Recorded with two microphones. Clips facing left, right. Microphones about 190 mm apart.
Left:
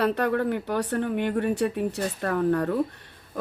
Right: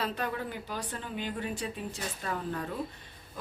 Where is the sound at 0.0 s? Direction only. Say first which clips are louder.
Left 10 dB; 65° left (ahead or behind).